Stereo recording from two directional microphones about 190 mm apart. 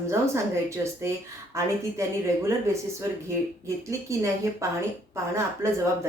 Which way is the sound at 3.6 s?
15° right (ahead or behind).